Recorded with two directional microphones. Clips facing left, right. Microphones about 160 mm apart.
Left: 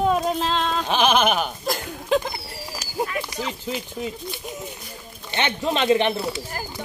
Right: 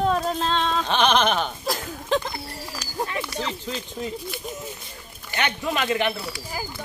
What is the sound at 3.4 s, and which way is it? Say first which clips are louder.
Speech: left 1 dB; 10° left (ahead or behind).